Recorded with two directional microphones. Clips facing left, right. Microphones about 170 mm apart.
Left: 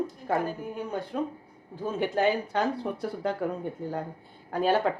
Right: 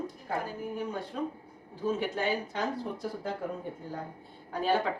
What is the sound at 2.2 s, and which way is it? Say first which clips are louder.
Speech: left 6 dB; 65° left (ahead or behind).